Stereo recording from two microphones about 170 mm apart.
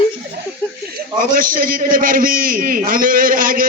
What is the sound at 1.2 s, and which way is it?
A man's voice, 55° right (ahead or behind).